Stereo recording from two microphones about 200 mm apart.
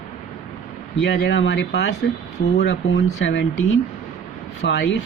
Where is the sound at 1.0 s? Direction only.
65° left (ahead or behind).